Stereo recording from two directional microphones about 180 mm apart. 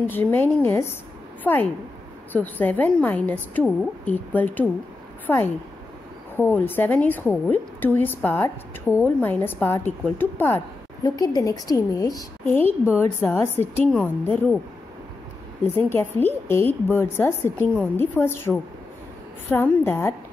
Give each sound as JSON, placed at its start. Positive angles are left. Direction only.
{"t": 0.0, "sound": "a woman's voice", "side_deg": 10}
{"t": 11.1, "sound": "a woman's voice", "side_deg": 20}
{"t": 15.6, "sound": "a woman's voice", "side_deg": 10}
{"t": 19.5, "sound": "a woman's voice", "side_deg": 10}